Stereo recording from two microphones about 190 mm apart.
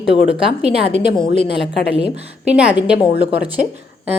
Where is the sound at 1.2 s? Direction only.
25° left (ahead or behind).